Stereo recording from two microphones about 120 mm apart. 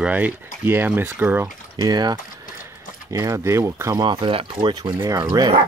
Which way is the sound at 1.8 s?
35° right (ahead or behind).